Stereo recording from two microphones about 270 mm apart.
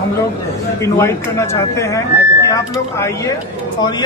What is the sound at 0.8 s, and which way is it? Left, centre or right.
Speech, centre.